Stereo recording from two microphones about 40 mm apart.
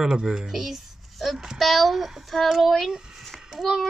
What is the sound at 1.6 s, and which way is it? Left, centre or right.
Speech, centre.